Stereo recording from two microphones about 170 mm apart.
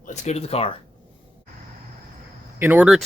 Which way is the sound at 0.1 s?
40° left (ahead or behind).